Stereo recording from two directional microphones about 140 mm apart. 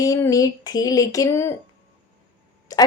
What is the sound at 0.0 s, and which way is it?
A woman's voice, 25° left (ahead or behind).